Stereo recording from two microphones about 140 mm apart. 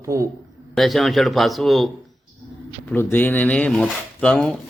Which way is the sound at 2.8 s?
15° left (ahead or behind).